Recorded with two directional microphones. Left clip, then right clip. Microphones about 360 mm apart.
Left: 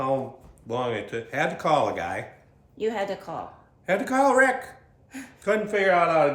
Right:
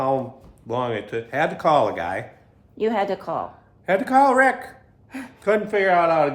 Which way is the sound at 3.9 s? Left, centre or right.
Centre.